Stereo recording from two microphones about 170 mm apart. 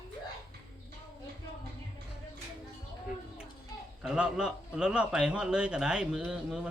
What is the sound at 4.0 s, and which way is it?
A man's voice, 5° right (ahead or behind).